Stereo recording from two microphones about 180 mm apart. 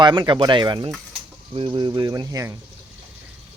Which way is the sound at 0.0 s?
25° right (ahead or behind).